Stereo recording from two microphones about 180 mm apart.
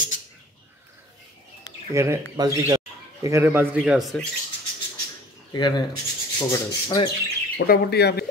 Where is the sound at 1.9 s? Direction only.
15° right (ahead or behind).